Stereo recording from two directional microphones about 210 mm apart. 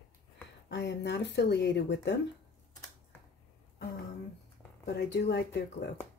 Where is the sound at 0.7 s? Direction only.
55° left (ahead or behind).